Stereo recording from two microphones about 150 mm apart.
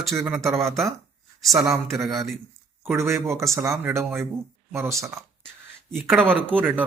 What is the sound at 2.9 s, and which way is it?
Speech, 15° right (ahead or behind).